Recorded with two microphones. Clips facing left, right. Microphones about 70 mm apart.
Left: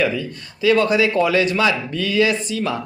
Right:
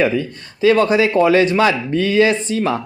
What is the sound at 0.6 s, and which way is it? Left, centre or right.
A man's voice, right.